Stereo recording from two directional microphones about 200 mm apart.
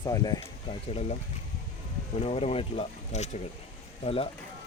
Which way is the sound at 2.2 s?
30° left (ahead or behind).